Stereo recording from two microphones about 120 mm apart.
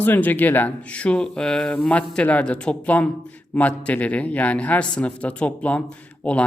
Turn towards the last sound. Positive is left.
turn(degrees=10)  # may be behind; listen again after turning